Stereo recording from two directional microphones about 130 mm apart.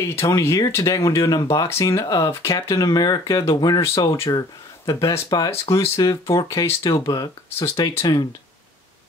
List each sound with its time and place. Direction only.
0.0 s speech: 20° left (ahead or behind)